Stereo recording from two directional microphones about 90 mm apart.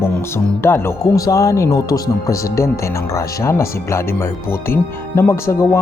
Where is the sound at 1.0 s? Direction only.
35° left (ahead or behind).